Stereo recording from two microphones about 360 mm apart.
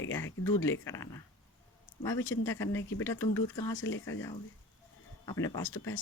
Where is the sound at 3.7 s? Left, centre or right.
Left.